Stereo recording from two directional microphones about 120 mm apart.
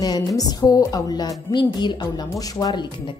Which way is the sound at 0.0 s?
30° left (ahead or behind).